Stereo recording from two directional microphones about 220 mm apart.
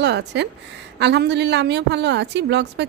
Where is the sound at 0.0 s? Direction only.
50° right (ahead or behind).